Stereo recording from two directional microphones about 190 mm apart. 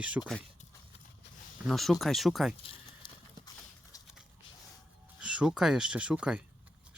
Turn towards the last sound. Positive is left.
turn(degrees=-5)  # may be behind; listen again after turning